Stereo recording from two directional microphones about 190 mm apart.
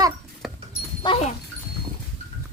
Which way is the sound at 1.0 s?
25° left (ahead or behind).